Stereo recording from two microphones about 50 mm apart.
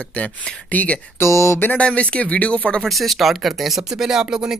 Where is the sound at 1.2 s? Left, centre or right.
Left.